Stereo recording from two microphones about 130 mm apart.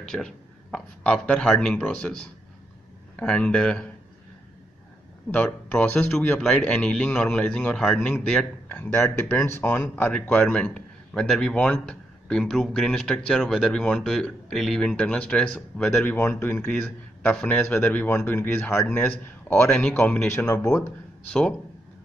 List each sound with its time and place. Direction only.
0.0 s a man's voice: 5° left (ahead or behind)
5.3 s a man's voice: 10° left (ahead or behind)
20.2 s speech: 20° left (ahead or behind)
21.3 s a man's voice: 10° left (ahead or behind)